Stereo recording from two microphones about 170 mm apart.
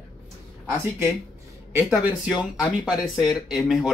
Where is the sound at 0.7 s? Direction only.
15° right (ahead or behind).